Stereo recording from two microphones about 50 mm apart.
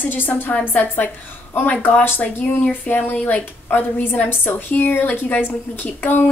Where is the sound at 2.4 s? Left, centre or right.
Left.